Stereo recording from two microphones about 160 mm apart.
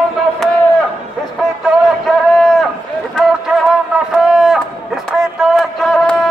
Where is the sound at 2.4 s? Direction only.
Centre (ahead or behind).